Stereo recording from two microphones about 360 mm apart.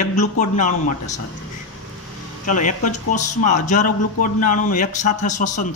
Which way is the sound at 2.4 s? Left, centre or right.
Left.